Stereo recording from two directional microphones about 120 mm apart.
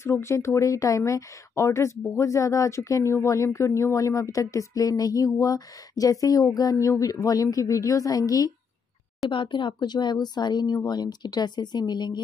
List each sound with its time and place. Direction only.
0.0 s speech: 20° left (ahead or behind)
9.3 s speech: 45° left (ahead or behind)